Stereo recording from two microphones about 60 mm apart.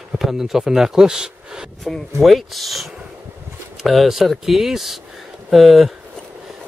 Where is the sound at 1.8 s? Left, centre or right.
Centre.